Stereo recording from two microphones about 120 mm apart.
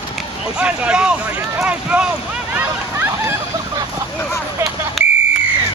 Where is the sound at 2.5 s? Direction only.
15° right (ahead or behind).